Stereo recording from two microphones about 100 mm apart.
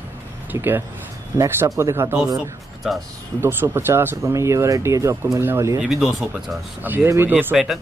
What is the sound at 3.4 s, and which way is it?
Speech, 25° right (ahead or behind).